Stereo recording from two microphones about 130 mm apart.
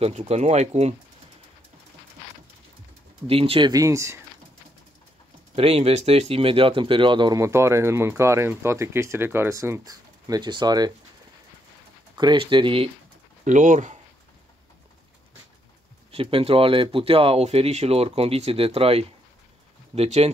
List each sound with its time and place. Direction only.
0.0 s speech: 55° right (ahead or behind)
3.3 s speech: 45° right (ahead or behind)
3.7 s speech: 25° right (ahead or behind)
5.6 s speech: 50° right (ahead or behind)
7.3 s speech: 20° right (ahead or behind)
12.2 s speech: 35° right (ahead or behind)
13.4 s speech: 75° right (ahead or behind)
16.1 s speech: 45° right (ahead or behind)